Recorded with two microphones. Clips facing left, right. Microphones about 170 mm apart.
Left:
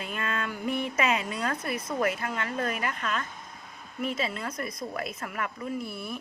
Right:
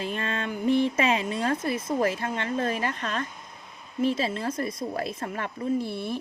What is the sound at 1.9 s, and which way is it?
A woman's voice, 30° right (ahead or behind).